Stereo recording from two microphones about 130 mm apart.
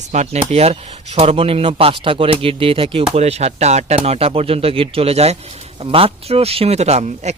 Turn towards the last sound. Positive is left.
turn(degrees=-60)  # may be behind; listen again after turning